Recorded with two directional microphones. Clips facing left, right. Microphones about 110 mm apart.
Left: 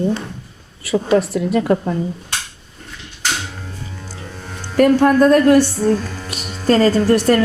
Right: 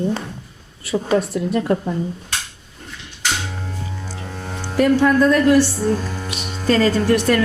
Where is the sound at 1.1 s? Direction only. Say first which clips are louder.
Left 3 dB; 90° left.